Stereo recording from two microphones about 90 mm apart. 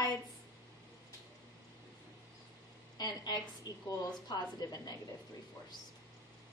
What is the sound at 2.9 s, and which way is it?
A woman's voice, 50° left (ahead or behind).